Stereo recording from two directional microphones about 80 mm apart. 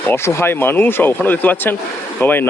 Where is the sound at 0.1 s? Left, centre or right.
Left.